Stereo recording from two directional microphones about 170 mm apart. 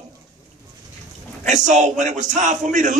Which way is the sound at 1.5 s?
45° right (ahead or behind).